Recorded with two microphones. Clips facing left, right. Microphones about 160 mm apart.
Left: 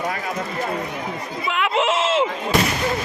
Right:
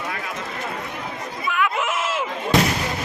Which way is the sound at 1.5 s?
25° left (ahead or behind).